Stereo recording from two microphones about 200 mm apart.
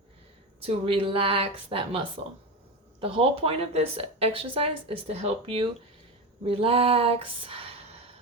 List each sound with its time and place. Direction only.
0.6 s speech: 25° right (ahead or behind)